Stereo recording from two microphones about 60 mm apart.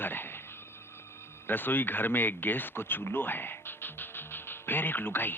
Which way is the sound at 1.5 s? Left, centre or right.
Left.